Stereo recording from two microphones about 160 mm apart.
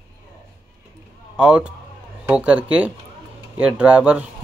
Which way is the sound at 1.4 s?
5° right (ahead or behind).